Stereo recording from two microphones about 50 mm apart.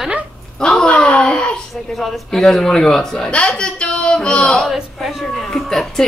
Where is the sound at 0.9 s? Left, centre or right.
Left.